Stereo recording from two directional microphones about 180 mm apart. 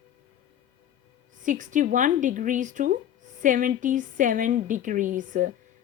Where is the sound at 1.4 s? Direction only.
45° right (ahead or behind).